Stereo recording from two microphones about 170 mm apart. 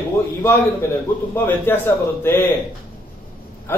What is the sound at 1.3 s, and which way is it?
A man's voice, 10° left (ahead or behind).